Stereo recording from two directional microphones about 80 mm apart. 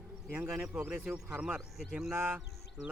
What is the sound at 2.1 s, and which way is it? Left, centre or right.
Speech, right.